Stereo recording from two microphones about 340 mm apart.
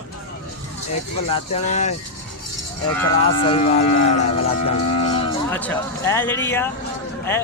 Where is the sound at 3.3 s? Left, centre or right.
Centre.